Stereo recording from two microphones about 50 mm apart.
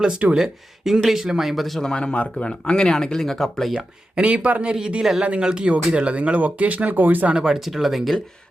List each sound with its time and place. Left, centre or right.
0.3 s speech: centre
1.8 s speech: centre
3.8 s speech: right
7.3 s speech: centre